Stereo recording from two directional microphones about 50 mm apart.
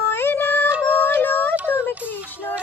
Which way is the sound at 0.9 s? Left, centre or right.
Left.